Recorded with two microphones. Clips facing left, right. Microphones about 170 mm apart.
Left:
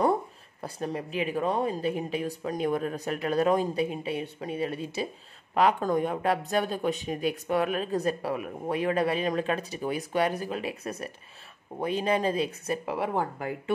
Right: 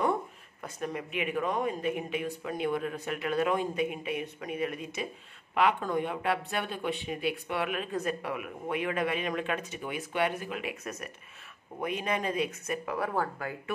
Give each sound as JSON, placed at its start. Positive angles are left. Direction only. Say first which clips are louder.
{"t": 0.6, "sound": "a woman's voice", "louder": "left 3 dB", "side_deg": 35}